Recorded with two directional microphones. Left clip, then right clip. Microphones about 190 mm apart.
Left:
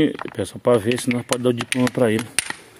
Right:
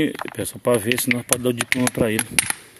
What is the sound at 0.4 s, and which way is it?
Speech, 5° right (ahead or behind).